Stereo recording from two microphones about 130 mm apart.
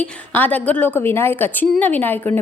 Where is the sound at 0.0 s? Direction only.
15° left (ahead or behind).